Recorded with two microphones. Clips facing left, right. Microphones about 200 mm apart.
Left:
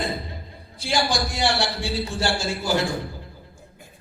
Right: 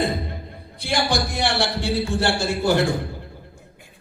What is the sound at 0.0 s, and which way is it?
A man's voice, 60° right (ahead or behind).